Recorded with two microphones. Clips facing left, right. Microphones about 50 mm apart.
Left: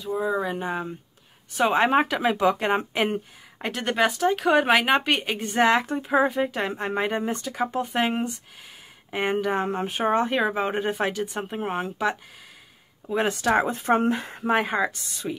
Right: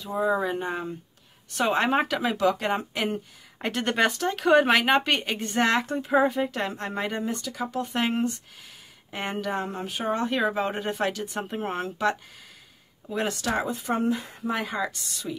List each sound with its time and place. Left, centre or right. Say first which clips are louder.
0.0 s speech: even; centre
2.4 s speech: left 1 dB; left
3.5 s speech: even; centre
6.7 s speech: left 4 dB; left
7.8 s speech: right 2 dB; centre
9.1 s speech: left 5 dB; centre; by 10.2 s left
10.2 s speech: left 1 dB; centre
13.0 s speech: left 4 dB; left
13.6 s speech: left 5 dB; left